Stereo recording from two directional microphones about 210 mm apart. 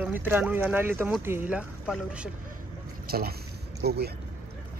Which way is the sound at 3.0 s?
45° right (ahead or behind).